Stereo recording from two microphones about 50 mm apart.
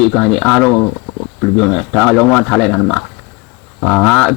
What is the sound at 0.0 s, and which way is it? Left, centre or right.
Speech, left.